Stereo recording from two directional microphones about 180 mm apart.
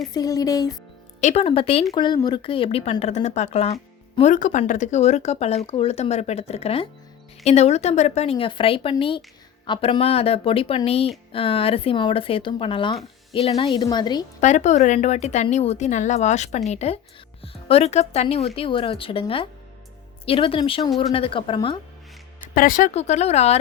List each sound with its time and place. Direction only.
0.1 s speech: 20° left (ahead or behind)
1.2 s a woman's voice: 35° left (ahead or behind)
14.4 s a woman's voice: 40° left (ahead or behind)
22.5 s a woman's voice: 50° left (ahead or behind)